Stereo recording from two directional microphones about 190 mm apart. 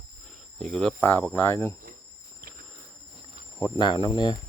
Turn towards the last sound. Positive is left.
turn(degrees=25)  # may be behind; listen again after turning